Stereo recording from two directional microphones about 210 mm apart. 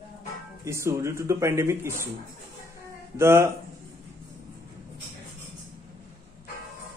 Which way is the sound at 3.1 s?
10° right (ahead or behind).